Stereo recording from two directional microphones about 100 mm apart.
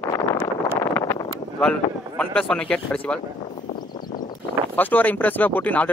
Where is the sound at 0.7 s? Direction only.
25° left (ahead or behind).